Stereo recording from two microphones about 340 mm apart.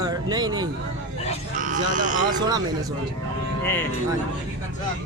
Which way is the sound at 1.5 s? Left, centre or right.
Right.